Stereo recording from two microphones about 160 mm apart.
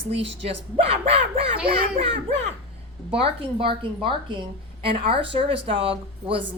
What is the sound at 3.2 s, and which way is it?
A woman's voice, 35° right (ahead or behind).